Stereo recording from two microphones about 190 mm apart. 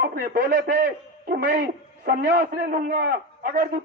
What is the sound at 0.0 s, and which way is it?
A man's voice, 50° right (ahead or behind).